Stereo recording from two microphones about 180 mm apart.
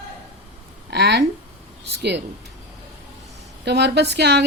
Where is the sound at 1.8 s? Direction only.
70° right (ahead or behind).